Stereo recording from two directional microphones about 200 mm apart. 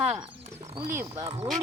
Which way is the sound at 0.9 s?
15° right (ahead or behind).